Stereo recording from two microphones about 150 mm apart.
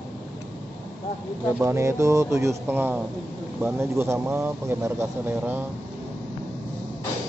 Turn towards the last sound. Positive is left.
turn(degrees=-10)  # may be behind; listen again after turning